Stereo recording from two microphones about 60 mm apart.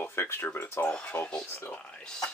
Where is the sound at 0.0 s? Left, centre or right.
Left.